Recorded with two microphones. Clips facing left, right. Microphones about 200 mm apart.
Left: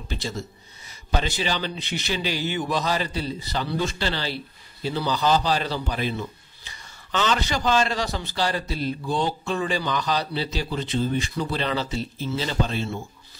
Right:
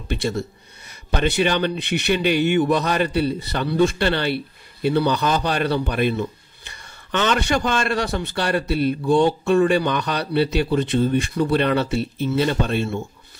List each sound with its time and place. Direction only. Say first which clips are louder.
0.1 s a man's voice: right 8 dB; 60° right (ahead or behind)